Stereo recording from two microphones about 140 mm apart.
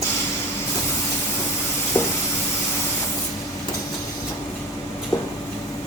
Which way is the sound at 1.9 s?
15° left (ahead or behind).